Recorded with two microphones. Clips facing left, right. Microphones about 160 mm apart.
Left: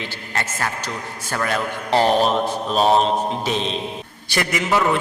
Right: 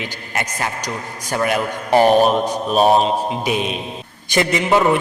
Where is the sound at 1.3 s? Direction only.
15° right (ahead or behind).